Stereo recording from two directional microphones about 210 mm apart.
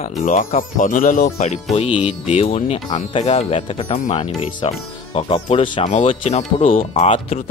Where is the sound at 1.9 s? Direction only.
5° right (ahead or behind).